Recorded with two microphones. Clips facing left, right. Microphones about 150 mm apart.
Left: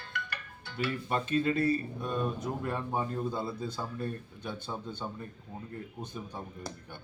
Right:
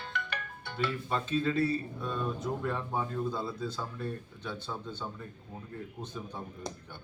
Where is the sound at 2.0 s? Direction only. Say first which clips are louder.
Left 2 dB; 15° left (ahead or behind).